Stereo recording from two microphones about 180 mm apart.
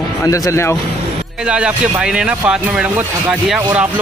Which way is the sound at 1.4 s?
5° right (ahead or behind).